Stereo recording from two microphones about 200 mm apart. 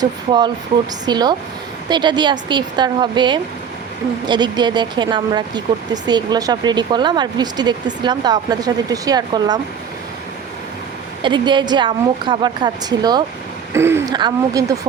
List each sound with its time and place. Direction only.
0.0 s speech: 20° right (ahead or behind)
11.2 s speech: 20° right (ahead or behind)